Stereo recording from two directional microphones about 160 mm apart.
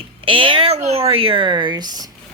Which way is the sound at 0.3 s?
35° right (ahead or behind).